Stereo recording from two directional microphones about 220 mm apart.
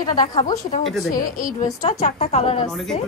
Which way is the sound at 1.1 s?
40° left (ahead or behind).